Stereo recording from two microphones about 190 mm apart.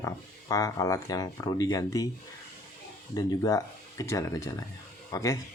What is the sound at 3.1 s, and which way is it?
Speech, 20° left (ahead or behind).